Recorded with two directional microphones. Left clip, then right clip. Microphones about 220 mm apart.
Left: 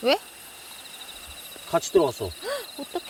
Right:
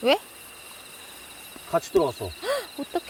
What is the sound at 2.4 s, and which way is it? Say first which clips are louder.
Speech: right 3 dB; 35° right (ahead or behind).